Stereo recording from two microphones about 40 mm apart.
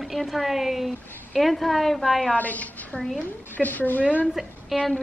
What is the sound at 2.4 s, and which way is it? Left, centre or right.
Speech, left.